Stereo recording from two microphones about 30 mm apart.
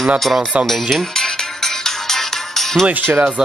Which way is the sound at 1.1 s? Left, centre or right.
Centre.